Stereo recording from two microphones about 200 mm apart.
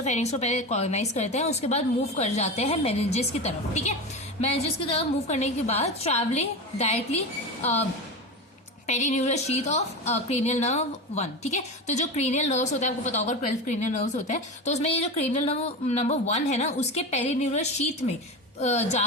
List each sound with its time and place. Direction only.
0.0 s a woman's voice: 35° left (ahead or behind)
8.9 s a woman's voice: 35° left (ahead or behind)